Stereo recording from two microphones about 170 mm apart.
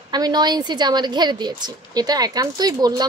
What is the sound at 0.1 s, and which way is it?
A woman's voice, 25° right (ahead or behind).